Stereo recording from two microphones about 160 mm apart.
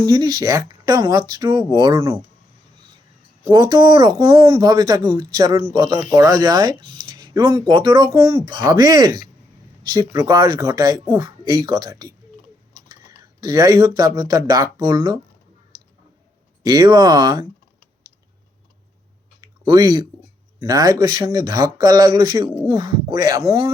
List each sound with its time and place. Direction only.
0.1 s speech: 25° right (ahead or behind)
2.0 s speech: 15° right (ahead or behind)
3.5 s speech: 30° right (ahead or behind)
16.6 s speech: 25° right (ahead or behind)
19.4 s a sound: 20° right (ahead or behind)
20.6 s speech: 20° right (ahead or behind)